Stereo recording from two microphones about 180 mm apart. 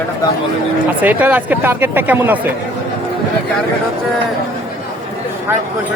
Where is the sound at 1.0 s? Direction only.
10° right (ahead or behind).